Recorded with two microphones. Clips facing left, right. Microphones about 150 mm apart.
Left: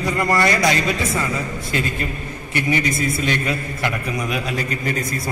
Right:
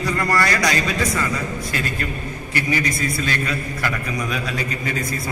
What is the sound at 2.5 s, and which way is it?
A man's voice, 25° left (ahead or behind).